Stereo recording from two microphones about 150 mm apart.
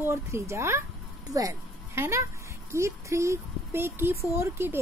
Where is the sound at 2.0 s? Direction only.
20° right (ahead or behind).